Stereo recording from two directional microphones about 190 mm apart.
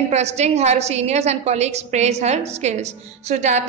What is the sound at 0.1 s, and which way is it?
A woman's voice, 35° right (ahead or behind).